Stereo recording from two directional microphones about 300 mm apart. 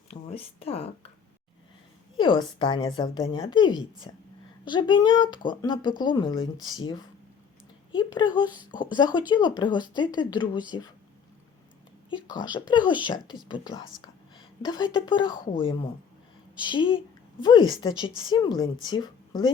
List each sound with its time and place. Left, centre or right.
0.1 s speech: centre
2.1 s a woman's voice: centre
12.5 s a woman's voice: centre
14.0 s a sound: centre
14.9 s a woman's voice: centre